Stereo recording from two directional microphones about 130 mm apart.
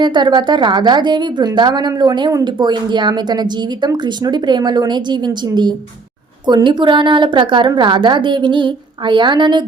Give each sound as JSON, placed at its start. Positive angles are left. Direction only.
{"t": 0.0, "sound": "a woman's voice", "side_deg": -35}